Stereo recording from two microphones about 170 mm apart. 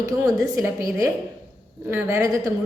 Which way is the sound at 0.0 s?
20° right (ahead or behind).